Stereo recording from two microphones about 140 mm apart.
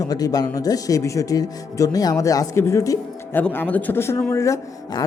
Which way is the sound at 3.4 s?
10° left (ahead or behind).